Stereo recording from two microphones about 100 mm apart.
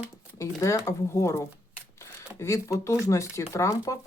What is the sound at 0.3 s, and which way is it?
Speech, 30° left (ahead or behind).